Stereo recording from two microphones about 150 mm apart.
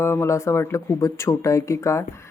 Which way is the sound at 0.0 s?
15° left (ahead or behind).